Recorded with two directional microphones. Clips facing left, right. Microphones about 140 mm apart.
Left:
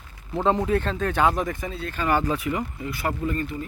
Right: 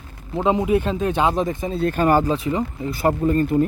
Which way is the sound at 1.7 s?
45° right (ahead or behind).